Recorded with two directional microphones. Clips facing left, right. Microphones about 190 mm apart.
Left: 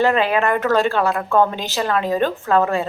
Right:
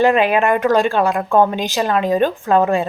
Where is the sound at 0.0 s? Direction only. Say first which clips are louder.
Right 3 dB; 15° right (ahead or behind).